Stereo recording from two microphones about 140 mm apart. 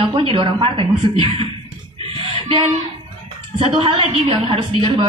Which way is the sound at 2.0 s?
45° right (ahead or behind).